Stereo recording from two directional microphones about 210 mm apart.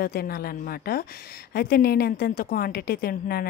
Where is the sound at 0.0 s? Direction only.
45° left (ahead or behind).